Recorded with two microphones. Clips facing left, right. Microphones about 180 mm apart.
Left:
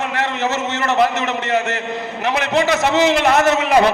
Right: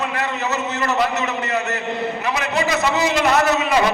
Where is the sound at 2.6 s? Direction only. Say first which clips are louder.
Left 4 dB; 90° left.